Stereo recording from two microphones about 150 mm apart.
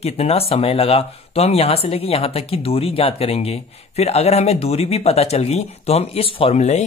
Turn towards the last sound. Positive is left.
turn(degrees=45)  # may be behind; listen again after turning